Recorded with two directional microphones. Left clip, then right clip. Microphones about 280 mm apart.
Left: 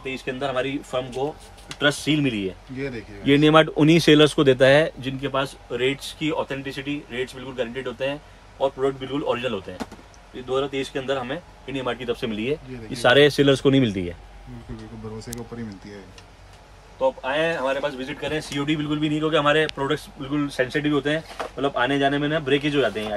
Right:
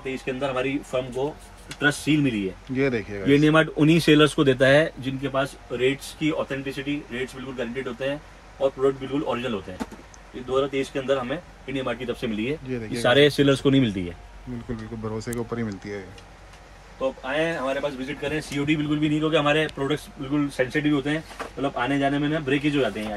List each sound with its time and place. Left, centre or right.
0.0 s a man's voice: centre
3.5 s speech: left
5.2 s a man's voice: centre
13.4 s speech: centre
15.1 s a man's voice: centre
17.0 s a man's voice: centre